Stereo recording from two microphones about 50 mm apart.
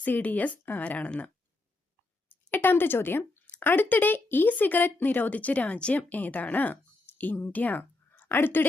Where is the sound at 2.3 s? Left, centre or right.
Left.